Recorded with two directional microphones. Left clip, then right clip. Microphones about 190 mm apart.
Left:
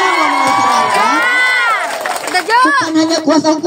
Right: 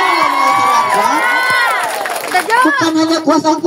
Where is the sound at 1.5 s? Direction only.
50° left (ahead or behind).